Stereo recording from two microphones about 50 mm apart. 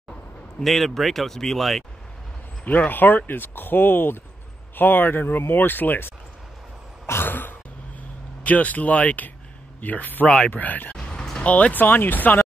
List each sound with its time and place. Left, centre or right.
0.6 s speech: centre
2.6 s speech: left
7.1 s throat clearing: left
8.5 s speech: left
10.2 s speech: centre
10.5 s speech: left
11.0 s a sound: centre
11.4 s speech: left